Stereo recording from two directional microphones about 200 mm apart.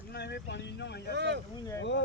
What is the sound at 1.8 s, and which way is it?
Speech, 65° left (ahead or behind).